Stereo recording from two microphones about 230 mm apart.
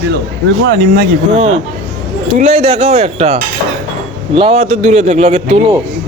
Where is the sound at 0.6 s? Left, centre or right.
Right.